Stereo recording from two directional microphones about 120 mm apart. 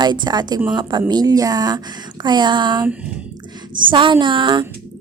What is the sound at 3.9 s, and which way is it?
Speech, 40° right (ahead or behind).